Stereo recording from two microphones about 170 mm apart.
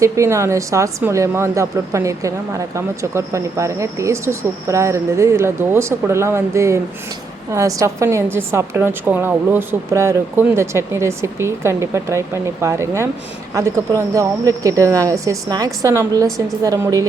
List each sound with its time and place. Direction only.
0.0 s a woman's voice: 15° right (ahead or behind)